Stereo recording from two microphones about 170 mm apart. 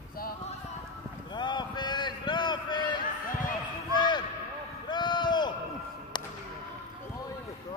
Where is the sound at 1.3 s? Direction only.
25° left (ahead or behind).